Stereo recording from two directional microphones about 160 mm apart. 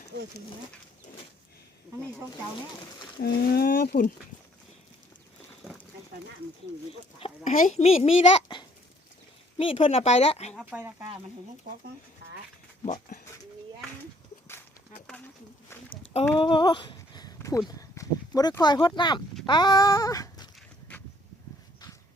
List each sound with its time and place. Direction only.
3.2 s speech: 70° left (ahead or behind)
7.4 s a woman's voice: 50° left (ahead or behind)
9.6 s speech: 35° left (ahead or behind)
10.7 s speech: 10° right (ahead or behind)
12.8 s speech: 55° left (ahead or behind)
15.0 s a sound: 10° left (ahead or behind)
16.4 s a sound: 30° left (ahead or behind)
17.7 s speech: 20° left (ahead or behind)
19.5 s a sound: 25° left (ahead or behind)